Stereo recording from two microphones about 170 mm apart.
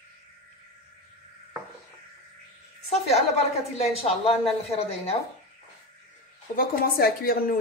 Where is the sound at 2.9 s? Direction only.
40° left (ahead or behind).